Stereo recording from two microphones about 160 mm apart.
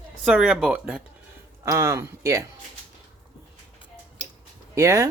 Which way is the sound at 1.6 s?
20° right (ahead or behind).